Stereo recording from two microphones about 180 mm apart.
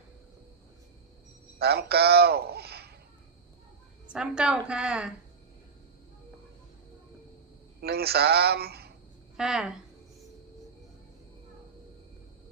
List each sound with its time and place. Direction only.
1.5 s a man's voice: 60° right (ahead or behind)
4.1 s a woman's voice: 5° right (ahead or behind)
7.8 s a man's voice: 60° right (ahead or behind)
9.4 s a woman's voice: 5° right (ahead or behind)